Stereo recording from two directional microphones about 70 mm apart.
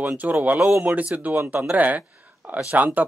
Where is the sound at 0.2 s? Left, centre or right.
Right.